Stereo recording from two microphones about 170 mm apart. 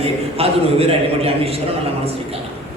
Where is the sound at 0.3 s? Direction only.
35° right (ahead or behind).